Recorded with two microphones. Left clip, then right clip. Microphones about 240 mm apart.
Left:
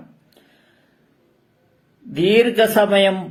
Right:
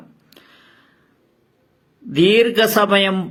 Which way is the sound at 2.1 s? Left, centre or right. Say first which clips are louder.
Right 2 dB; right.